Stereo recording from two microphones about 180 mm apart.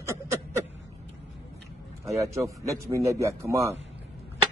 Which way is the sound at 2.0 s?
15° right (ahead or behind).